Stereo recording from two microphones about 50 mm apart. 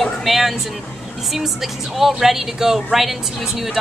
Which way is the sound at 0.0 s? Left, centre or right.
Centre.